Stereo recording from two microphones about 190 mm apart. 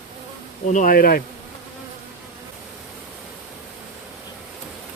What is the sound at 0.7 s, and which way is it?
Speech, 45° left (ahead or behind).